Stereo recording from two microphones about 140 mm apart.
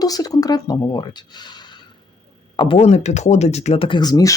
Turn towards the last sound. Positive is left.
turn(degrees=25)  # may be behind; listen again after turning